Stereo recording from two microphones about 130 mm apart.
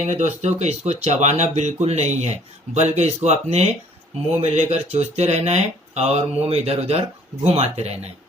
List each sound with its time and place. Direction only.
0.0 s speech: 60° right (ahead or behind)